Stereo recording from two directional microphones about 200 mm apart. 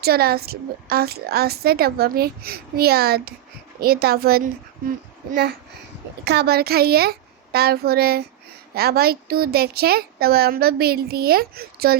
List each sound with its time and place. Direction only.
0.0 s a woman's voice: 50° right (ahead or behind)